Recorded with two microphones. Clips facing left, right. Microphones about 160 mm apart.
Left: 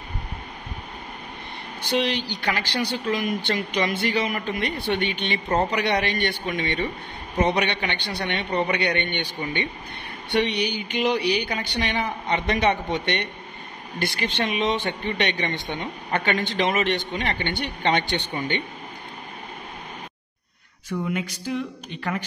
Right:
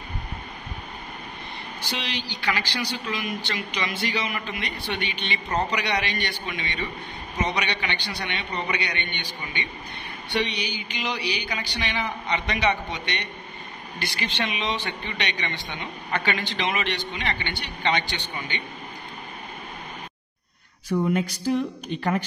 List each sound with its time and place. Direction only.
1.8 s speech: 55° left (ahead or behind)
5.5 s a man's voice: 30° left (ahead or behind)
5.8 s speech: 50° left (ahead or behind)
20.9 s speech: 35° right (ahead or behind)